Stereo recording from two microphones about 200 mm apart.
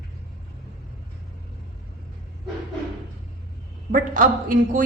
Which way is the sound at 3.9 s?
40° right (ahead or behind).